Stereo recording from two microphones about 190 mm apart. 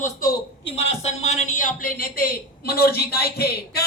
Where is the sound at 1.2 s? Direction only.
35° left (ahead or behind).